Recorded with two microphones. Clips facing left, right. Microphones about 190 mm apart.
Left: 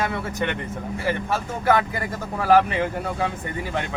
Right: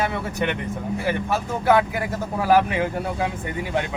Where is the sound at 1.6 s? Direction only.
10° right (ahead or behind).